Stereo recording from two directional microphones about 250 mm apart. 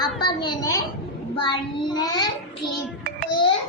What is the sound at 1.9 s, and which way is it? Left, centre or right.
Speech, centre.